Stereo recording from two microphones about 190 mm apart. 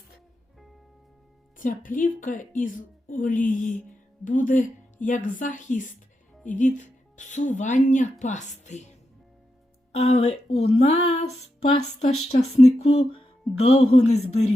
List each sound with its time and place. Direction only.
1.5 s a woman's voice: 45° left (ahead or behind)
9.9 s speech: 35° left (ahead or behind)